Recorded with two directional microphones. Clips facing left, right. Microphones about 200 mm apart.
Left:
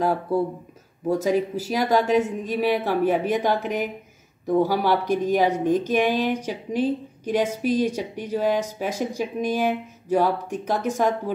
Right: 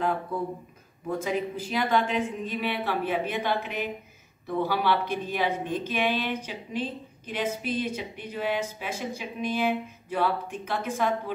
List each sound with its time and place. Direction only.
0.0 s speech: 35° left (ahead or behind)
5.0 s speech: 15° left (ahead or behind)
5.7 s a woman's voice: 45° left (ahead or behind)